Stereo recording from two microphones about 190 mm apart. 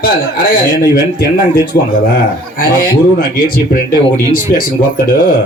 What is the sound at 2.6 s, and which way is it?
Speech, 50° left (ahead or behind).